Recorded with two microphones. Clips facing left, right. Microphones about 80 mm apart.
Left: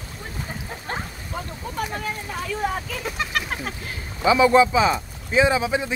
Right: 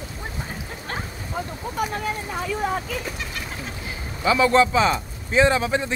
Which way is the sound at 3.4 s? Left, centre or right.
Left.